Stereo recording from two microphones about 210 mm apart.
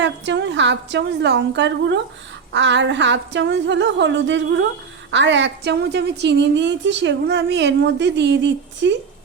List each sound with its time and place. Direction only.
0.0 s a woman's voice: 60° right (ahead or behind)